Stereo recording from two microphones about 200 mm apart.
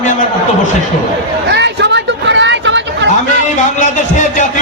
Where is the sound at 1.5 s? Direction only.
60° right (ahead or behind).